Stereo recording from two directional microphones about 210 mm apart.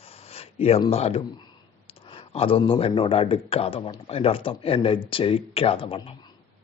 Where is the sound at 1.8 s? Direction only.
25° left (ahead or behind).